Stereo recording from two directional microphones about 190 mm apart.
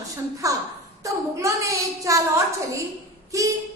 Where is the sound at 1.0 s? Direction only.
15° right (ahead or behind).